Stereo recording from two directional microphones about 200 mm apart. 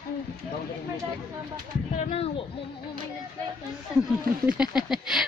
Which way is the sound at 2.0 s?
30° left (ahead or behind).